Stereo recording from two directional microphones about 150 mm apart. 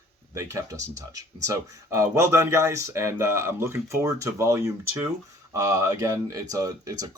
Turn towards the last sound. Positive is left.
turn(degrees=-25)  # may be behind; listen again after turning